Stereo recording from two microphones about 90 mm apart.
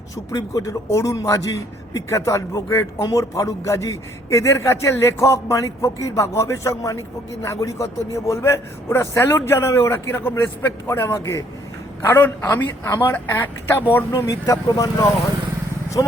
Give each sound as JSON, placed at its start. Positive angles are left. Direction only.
{"t": 0.3, "sound": "a man's voice", "side_deg": 35}
{"t": 14.1, "sound": "a man's voice", "side_deg": 40}